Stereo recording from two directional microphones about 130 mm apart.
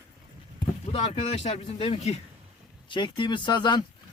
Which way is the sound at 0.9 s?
50° left (ahead or behind).